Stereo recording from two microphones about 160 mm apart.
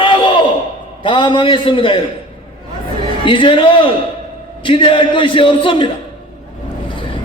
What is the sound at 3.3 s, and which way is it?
A man's voice, 35° left (ahead or behind).